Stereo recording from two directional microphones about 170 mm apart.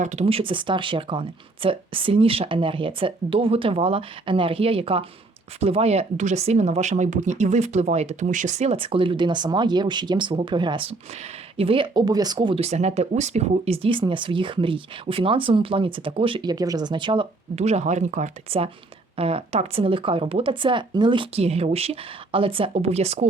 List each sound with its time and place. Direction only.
0.0 s speech: 40° right (ahead or behind)
18.5 s speech: 35° right (ahead or behind)